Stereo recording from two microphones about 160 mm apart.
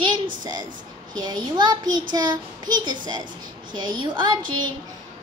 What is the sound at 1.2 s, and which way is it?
A child's voice, 25° right (ahead or behind).